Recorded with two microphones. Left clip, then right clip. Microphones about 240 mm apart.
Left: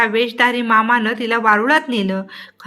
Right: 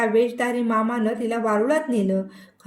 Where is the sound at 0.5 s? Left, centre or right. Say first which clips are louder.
Left 9 dB; centre.